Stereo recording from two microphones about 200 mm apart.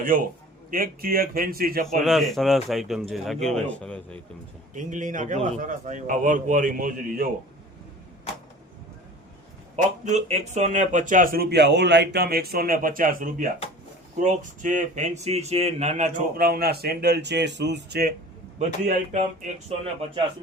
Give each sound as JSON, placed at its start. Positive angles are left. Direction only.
{"t": 0.7, "sound": "speech", "side_deg": -45}
{"t": 2.0, "sound": "speech", "side_deg": 0}
{"t": 4.7, "sound": "a man's voice", "side_deg": -40}
{"t": 10.0, "sound": "speech", "side_deg": -35}
{"t": 18.6, "sound": "a man's voice", "side_deg": -35}